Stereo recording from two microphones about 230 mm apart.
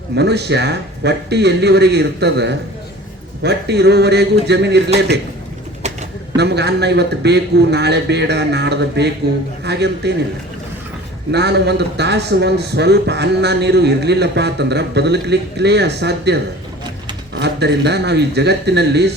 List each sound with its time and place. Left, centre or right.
0.2 s a man's voice: right
5.8 s pigeon: right
6.3 s a man's voice: right
11.3 s a man's voice: right